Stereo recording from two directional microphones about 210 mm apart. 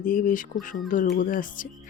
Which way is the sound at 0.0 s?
40° left (ahead or behind).